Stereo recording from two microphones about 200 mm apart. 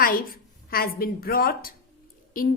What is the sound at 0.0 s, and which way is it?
A woman's voice, 45° left (ahead or behind).